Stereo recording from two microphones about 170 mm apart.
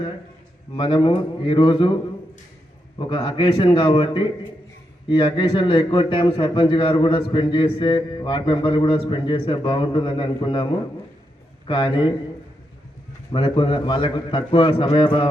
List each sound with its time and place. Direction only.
0.8 s a man's voice: 30° left (ahead or behind)
3.0 s a man's voice: 30° left (ahead or behind)
13.3 s a man's voice: 30° left (ahead or behind)